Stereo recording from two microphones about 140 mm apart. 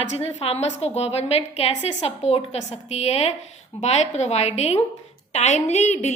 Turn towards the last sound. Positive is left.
turn(degrees=55)  # may be behind; listen again after turning